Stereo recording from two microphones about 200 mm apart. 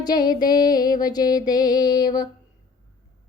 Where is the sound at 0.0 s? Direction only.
20° left (ahead or behind).